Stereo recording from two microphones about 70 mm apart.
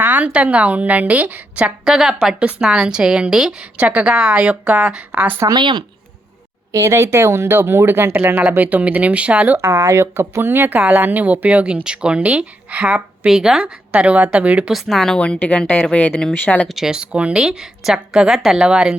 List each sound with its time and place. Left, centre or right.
0.0 s a woman's voice: right
1.8 s speech: centre
5.1 s speech: right
5.5 s speech: right
6.7 s speech: right; by 9.6 s centre
9.6 s speech: right; by 13.7 s centre
14.0 s speech: centre
14.7 s a woman's voice: centre; by 16.6 s left
16.6 s speech: centre